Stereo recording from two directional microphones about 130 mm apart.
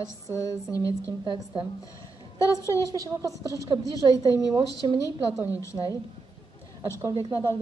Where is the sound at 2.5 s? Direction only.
25° left (ahead or behind).